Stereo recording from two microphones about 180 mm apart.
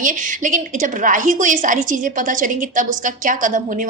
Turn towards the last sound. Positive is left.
turn(degrees=-45)  # may be behind; listen again after turning